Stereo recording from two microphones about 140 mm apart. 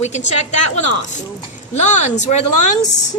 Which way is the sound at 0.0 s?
55° left (ahead or behind).